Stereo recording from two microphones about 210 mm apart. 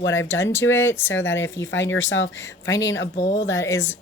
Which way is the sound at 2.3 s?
15° left (ahead or behind).